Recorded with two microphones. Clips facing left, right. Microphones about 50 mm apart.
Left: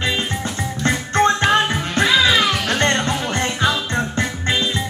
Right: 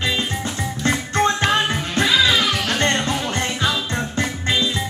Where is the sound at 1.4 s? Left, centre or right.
Centre.